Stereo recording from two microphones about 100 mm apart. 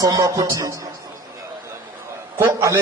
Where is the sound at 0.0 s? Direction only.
35° right (ahead or behind).